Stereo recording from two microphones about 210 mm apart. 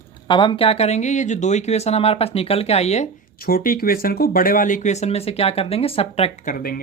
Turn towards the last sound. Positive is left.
turn(degrees=45)  # may be behind; listen again after turning